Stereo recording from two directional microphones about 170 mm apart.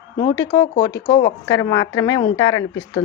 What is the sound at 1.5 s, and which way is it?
Speech, 20° left (ahead or behind).